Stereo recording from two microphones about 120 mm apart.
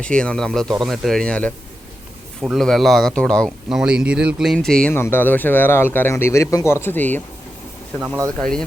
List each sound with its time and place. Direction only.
0.0 s speech: 10° left (ahead or behind)
3.7 s speech: 5° right (ahead or behind)
4.9 s speech: 20° left (ahead or behind)
8.4 s speech: 5° left (ahead or behind)